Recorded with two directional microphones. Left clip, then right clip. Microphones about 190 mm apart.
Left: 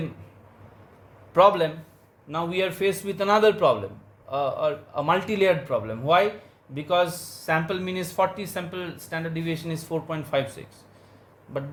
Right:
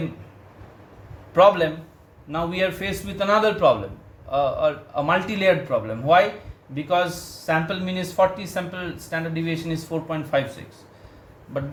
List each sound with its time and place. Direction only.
1.3 s speech: 50° left (ahead or behind)